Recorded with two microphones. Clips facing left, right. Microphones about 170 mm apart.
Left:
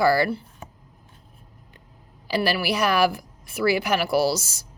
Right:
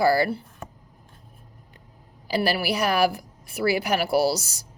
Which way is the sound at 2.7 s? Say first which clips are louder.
Left 2 dB; 35° right (ahead or behind).